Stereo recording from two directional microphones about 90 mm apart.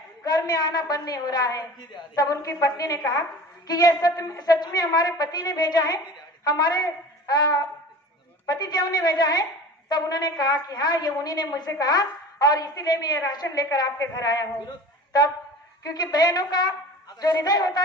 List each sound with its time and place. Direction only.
0.2 s a woman's voice: 45° left (ahead or behind)
15.8 s a woman's voice: 50° left (ahead or behind)